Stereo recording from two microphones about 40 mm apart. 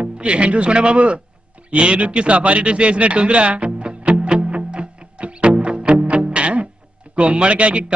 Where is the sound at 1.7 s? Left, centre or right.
Right.